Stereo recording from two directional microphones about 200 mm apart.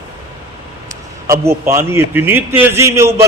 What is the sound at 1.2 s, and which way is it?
A man's voice, 15° right (ahead or behind).